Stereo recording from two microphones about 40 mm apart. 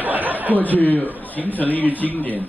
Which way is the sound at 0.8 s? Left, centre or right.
Left.